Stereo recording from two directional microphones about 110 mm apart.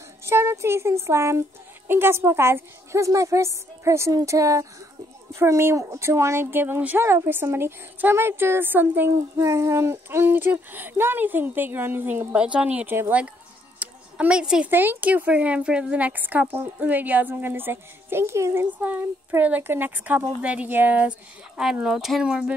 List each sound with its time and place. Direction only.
0.2 s a woman's voice: 25° right (ahead or behind)
13.7 s a sound: 10° right (ahead or behind)
14.7 s a woman's voice: 20° right (ahead or behind)